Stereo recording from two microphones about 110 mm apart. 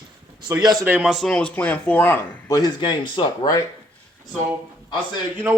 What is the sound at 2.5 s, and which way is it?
Speech, 40° left (ahead or behind).